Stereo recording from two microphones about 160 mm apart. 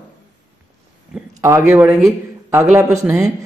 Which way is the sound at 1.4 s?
15° right (ahead or behind).